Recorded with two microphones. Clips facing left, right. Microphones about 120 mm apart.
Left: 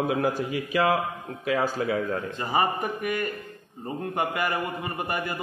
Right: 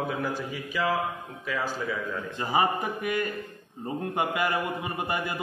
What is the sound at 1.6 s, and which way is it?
Speech, 55° left (ahead or behind).